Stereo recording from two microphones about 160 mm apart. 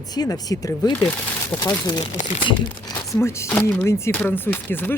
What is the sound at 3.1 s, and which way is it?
Speech, 15° left (ahead or behind).